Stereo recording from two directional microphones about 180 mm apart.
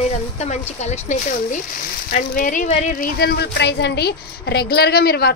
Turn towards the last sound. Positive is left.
turn(degrees=60)  # may be behind; listen again after turning